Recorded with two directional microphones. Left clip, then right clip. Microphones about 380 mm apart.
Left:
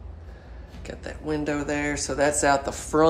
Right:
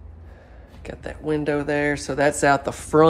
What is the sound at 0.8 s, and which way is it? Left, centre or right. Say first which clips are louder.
Speech: right 4 dB; centre.